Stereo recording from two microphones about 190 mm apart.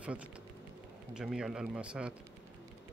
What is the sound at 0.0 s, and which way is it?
Speech, 5° right (ahead or behind).